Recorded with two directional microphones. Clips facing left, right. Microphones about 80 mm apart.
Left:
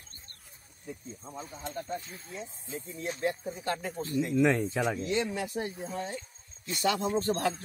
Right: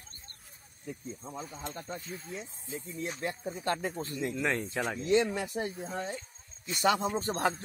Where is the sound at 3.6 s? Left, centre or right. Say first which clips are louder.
Right 1 dB; right.